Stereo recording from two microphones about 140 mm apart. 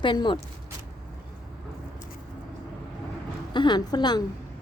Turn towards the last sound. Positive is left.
turn(degrees=30)  # may be behind; listen again after turning